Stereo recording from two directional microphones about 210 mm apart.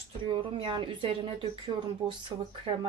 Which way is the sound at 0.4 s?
25° right (ahead or behind).